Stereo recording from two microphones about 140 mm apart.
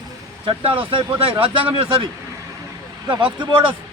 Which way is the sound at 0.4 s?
40° right (ahead or behind).